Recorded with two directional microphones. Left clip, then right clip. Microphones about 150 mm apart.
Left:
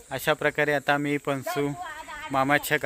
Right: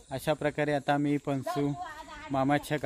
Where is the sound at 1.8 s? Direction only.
45° left (ahead or behind).